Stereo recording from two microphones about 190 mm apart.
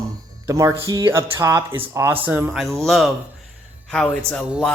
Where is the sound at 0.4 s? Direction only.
15° right (ahead or behind).